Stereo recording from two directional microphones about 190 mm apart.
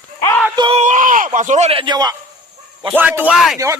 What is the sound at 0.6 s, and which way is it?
Speech, 30° right (ahead or behind).